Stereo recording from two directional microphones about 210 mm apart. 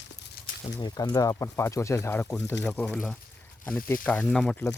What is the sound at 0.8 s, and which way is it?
Speech, 20° left (ahead or behind).